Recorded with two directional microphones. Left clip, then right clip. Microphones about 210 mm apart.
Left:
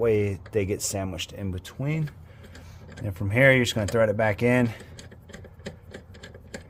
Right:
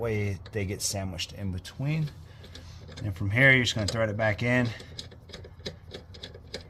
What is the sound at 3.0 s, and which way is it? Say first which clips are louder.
Speech: left 2 dB; 55° left (ahead or behind).